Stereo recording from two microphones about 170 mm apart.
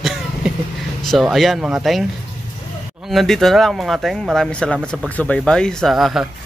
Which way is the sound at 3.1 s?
Centre (ahead or behind).